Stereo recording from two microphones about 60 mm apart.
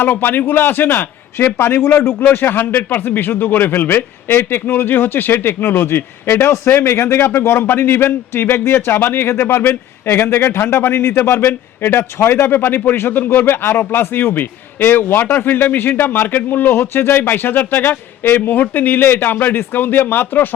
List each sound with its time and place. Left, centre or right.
0.0 s a man's voice: left